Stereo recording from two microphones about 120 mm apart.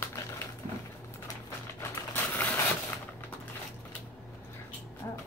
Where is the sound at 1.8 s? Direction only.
15° left (ahead or behind).